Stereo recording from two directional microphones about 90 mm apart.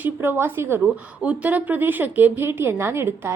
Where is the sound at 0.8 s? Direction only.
15° right (ahead or behind).